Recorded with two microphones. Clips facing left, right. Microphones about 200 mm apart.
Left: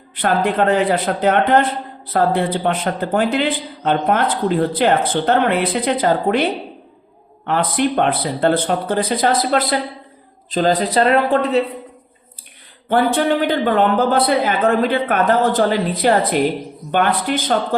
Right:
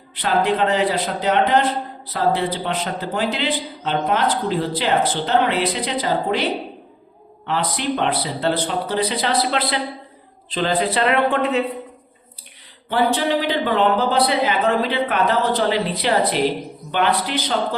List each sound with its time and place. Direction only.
0.2 s a man's voice: 50° left (ahead or behind)
7.4 s a man's voice: 55° left (ahead or behind)
12.9 s a man's voice: 50° left (ahead or behind)